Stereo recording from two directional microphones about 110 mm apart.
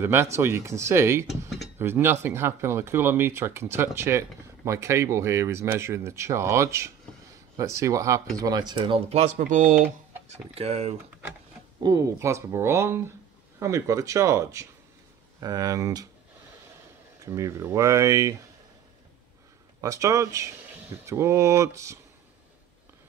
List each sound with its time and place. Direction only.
0.0 s speech: 20° right (ahead or behind); by 9.0 s 45° right (ahead or behind)
10.5 s speech: 70° right (ahead or behind)
11.8 s speech: 30° right (ahead or behind)
17.2 s speech: 25° right (ahead or behind)
19.8 s speech: 30° right (ahead or behind)